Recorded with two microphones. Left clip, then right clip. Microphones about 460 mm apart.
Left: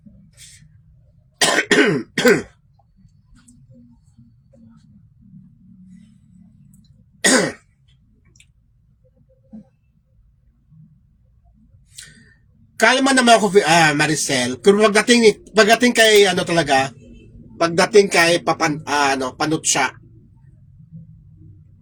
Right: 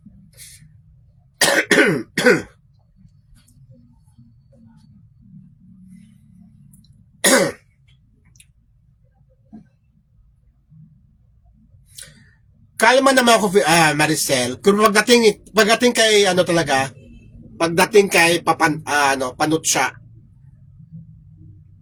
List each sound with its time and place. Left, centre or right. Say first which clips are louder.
1.4 s throat clearing: right 1 dB; right
7.2 s throat clearing: right 1 dB; right
12.7 s a man's voice: right 2 dB; right